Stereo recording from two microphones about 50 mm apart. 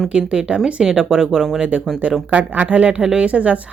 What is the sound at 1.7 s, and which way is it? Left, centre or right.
Speech, right.